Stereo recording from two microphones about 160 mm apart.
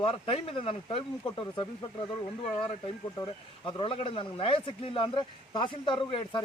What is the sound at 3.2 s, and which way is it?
A man's voice, 35° left (ahead or behind).